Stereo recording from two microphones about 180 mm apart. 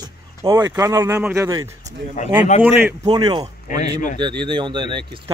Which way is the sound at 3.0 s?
25° right (ahead or behind).